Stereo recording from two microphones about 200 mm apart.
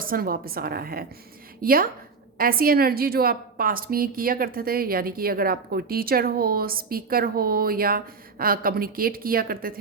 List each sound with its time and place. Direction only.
0.0 s a woman's voice: 45° right (ahead or behind)